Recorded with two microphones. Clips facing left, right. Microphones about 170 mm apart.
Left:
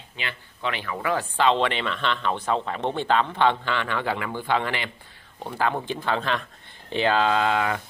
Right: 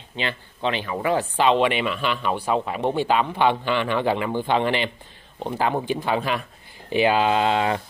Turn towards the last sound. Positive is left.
turn(degrees=-20)  # may be behind; listen again after turning